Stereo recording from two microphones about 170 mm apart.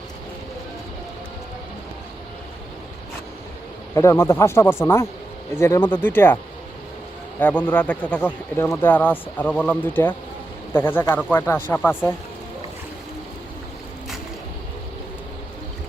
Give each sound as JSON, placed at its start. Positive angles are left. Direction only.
{"t": 3.9, "sound": "speech", "side_deg": 15}